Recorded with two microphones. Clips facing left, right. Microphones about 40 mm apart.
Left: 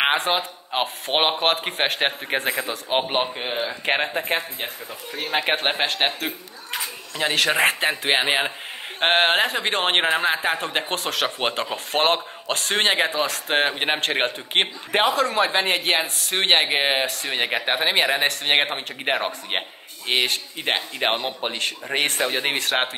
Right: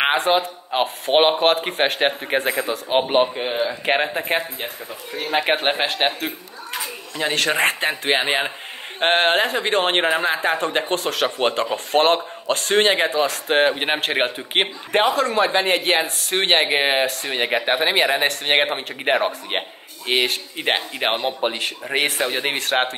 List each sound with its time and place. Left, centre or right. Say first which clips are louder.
0.0 s speech: right 3 dB; centre
20.7 s speech: right 3 dB; right
21.0 s speech: right 3 dB; centre